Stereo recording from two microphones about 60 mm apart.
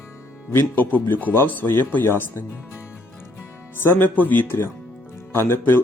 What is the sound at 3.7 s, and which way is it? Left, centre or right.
Speech, left.